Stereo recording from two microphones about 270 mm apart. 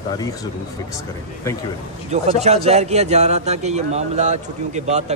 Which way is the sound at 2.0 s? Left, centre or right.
Right.